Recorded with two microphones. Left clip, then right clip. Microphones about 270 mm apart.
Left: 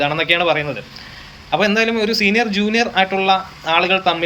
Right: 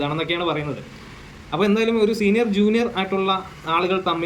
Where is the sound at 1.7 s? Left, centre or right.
Centre.